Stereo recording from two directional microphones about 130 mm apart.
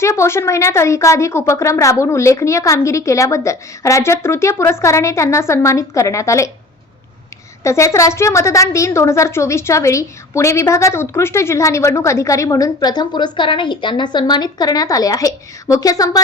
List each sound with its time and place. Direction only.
0.0 s a woman's voice: 20° left (ahead or behind)
7.6 s a woman's voice: 20° left (ahead or behind)